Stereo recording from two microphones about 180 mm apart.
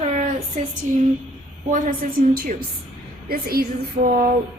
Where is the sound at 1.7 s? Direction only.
50° right (ahead or behind).